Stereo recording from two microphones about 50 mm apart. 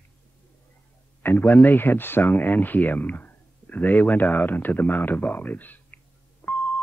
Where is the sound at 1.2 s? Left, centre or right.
Left.